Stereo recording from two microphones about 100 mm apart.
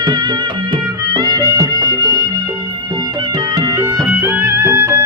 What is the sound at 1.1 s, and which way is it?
Music, 40° right (ahead or behind).